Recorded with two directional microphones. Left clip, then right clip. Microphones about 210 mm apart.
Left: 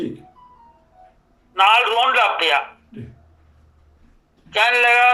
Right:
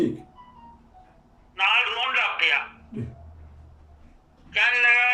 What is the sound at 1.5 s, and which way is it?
A man's voice, 40° left (ahead or behind).